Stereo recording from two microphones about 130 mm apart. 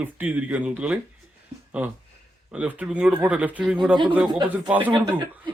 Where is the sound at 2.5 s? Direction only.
10° right (ahead or behind).